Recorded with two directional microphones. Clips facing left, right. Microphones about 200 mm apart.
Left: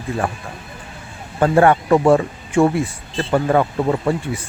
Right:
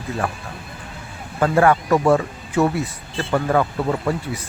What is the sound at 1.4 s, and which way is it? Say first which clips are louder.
Speech: left 3 dB; 30° left (ahead or behind).